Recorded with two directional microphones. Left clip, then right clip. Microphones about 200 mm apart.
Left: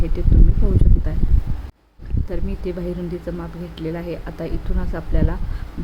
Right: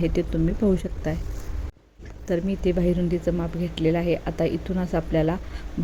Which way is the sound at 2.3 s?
20° right (ahead or behind).